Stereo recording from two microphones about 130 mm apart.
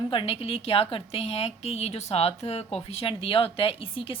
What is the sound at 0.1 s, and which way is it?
A woman's voice, 45° left (ahead or behind).